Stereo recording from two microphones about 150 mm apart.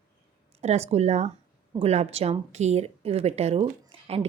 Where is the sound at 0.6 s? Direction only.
45° right (ahead or behind).